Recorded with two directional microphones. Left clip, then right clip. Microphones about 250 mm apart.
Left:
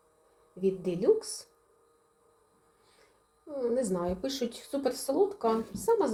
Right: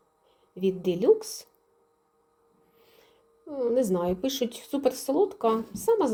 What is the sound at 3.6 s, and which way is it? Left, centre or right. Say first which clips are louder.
Speech: right 5 dB; right.